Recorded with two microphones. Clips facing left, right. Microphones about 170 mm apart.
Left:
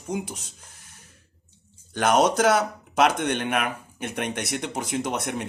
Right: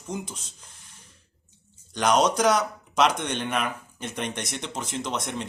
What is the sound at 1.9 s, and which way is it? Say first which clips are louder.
Speech: left 2 dB; 50° left (ahead or behind).